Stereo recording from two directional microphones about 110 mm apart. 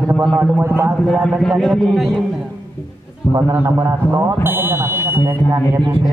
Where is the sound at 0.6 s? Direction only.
20° right (ahead or behind).